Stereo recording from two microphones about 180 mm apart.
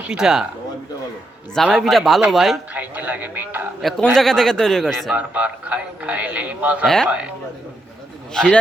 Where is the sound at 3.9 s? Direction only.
5° left (ahead or behind).